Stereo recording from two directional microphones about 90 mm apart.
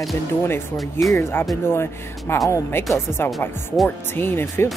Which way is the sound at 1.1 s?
25° left (ahead or behind).